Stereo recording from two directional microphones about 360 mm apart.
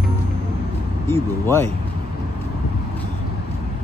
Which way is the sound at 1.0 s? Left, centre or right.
Centre.